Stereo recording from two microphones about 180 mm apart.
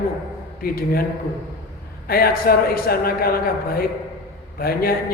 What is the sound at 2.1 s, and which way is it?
A man's voice, 55° left (ahead or behind).